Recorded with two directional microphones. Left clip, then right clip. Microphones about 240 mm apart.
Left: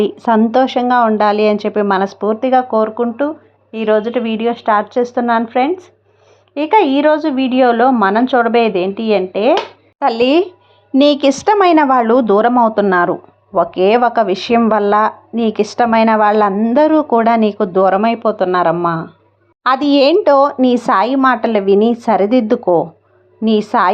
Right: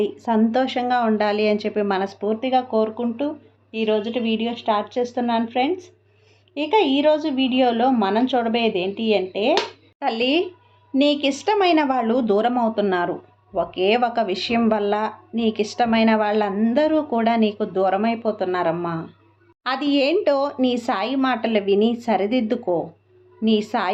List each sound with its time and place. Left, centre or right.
0.0 s speech: left